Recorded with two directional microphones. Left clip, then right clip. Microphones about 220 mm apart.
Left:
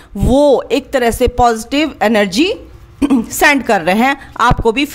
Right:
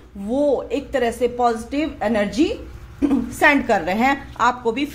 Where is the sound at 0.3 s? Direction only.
40° left (ahead or behind).